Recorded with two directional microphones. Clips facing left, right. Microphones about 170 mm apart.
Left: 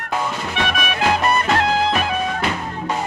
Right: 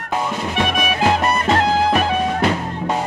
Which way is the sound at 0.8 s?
30° right (ahead or behind).